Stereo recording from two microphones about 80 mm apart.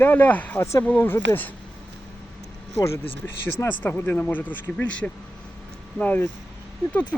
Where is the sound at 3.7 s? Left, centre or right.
Left.